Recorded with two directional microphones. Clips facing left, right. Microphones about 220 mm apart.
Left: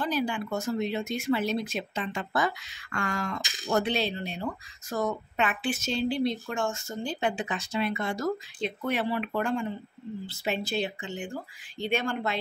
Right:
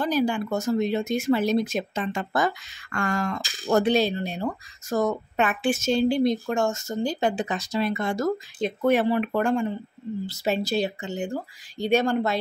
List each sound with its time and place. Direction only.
0.0 s speech: 40° right (ahead or behind)